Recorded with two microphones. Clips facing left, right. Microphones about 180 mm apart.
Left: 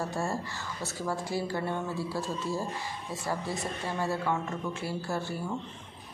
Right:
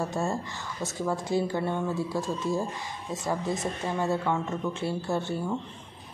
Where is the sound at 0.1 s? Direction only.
20° right (ahead or behind).